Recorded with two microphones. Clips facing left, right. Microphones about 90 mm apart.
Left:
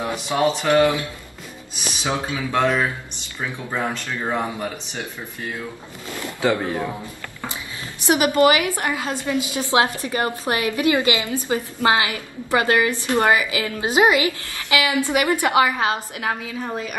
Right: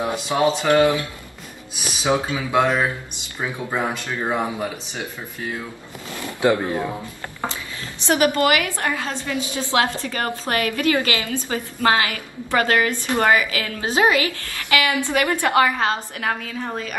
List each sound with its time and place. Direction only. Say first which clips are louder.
0.0 s speech: right 1 dB; 15° right (ahead or behind)
2.0 s speech: right 4 dB; 15° right (ahead or behind)
6.4 s speech: right 2 dB; 15° right (ahead or behind)
8.0 s a woman's voice: left 2 dB; 15° left (ahead or behind)